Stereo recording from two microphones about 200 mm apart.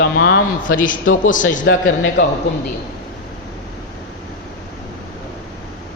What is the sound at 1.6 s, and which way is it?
Speech, 65° left (ahead or behind).